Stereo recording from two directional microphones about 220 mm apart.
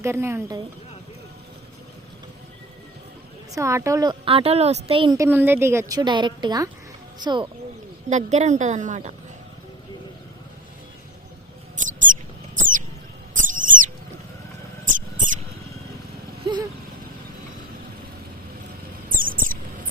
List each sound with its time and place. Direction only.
0.0 s a woman's voice: 10° right (ahead or behind)
3.5 s a woman's voice: 15° right (ahead or behind)
8.1 s a woman's voice: 30° right (ahead or behind)
11.8 s mouse: 35° right (ahead or behind)
13.3 s owl: 35° right (ahead or behind)
14.8 s mouse: 35° right (ahead or behind)
16.4 s a sound: 20° right (ahead or behind)
19.1 s cricket: 40° right (ahead or behind)